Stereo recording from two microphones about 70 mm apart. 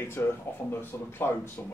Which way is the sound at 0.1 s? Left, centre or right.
Left.